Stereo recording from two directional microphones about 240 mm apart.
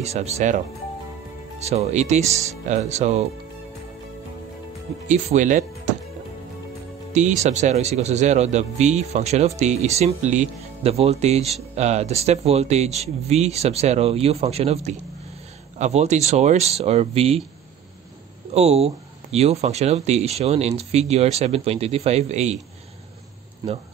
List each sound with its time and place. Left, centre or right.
0.0 s speech: right
1.6 s speech: right
5.0 s speech: right
7.1 s speech: right
18.5 s speech: right